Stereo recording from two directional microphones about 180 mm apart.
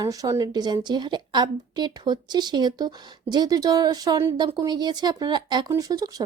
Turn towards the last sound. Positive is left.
turn(degrees=-20)  # may be behind; listen again after turning